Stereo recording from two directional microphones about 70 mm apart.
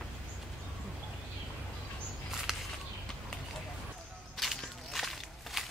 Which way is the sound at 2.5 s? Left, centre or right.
Centre.